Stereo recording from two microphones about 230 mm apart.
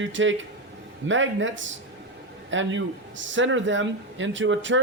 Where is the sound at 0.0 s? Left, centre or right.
Right.